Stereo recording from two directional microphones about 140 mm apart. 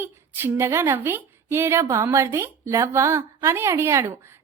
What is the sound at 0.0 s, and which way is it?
A woman's voice, 15° right (ahead or behind).